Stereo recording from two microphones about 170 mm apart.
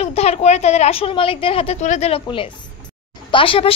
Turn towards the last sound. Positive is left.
turn(degrees=30)  # may be behind; listen again after turning